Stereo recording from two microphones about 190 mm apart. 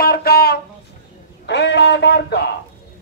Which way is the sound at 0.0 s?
50° left (ahead or behind).